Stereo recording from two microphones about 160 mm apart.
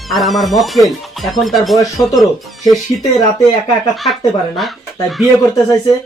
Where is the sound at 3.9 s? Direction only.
Centre (ahead or behind).